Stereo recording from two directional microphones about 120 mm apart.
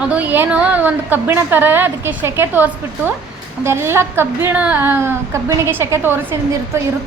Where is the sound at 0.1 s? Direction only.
15° right (ahead or behind).